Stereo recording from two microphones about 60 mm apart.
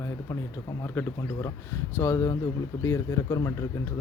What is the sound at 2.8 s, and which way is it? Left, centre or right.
Speech, left.